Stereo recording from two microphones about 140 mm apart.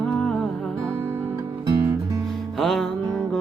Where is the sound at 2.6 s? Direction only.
Centre (ahead or behind).